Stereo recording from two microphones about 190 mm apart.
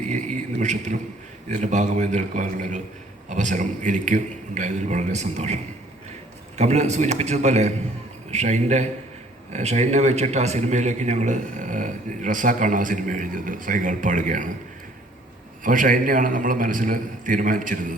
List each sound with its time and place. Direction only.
0.1 s a man's voice: 40° right (ahead or behind)
6.6 s a man's voice: 35° right (ahead or behind)
15.6 s a man's voice: 45° right (ahead or behind)